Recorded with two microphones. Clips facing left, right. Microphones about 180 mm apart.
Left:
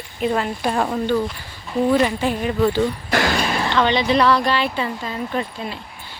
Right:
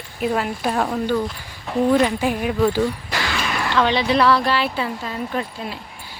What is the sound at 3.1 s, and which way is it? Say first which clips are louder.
Basketball bounce: left 5 dB; 45° left (ahead or behind).